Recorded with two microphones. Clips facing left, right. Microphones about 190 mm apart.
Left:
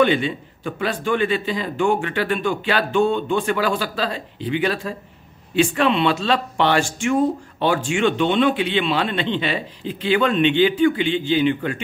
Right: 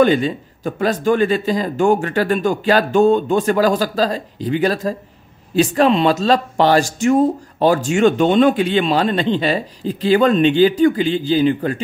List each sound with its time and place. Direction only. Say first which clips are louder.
0.0 s speech: right 4 dB; 40° right (ahead or behind)